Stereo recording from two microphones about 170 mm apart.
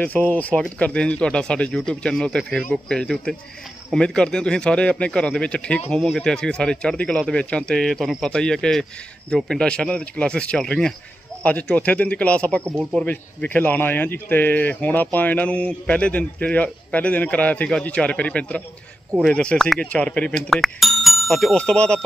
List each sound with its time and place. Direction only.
0.0 s a man's voice: 10° left (ahead or behind)